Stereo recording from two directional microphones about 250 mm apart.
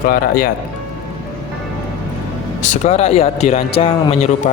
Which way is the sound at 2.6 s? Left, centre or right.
Left.